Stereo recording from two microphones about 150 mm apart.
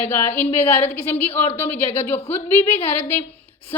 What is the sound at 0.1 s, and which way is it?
Speech, 15° left (ahead or behind).